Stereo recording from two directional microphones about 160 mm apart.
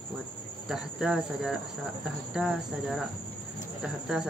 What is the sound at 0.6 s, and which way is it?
Cricket, 5° right (ahead or behind).